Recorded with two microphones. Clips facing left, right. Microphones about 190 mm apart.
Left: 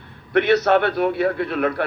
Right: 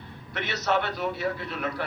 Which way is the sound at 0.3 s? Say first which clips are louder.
Left 11 dB; 60° left (ahead or behind).